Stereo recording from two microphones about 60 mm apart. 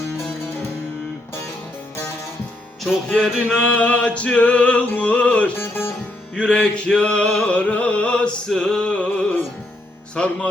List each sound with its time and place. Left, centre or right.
2.8 s music: centre
3.6 s music: centre
5.5 s music: left
6.3 s music: centre
9.0 s music: left